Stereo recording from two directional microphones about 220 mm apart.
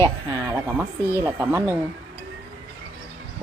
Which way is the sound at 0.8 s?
10° right (ahead or behind).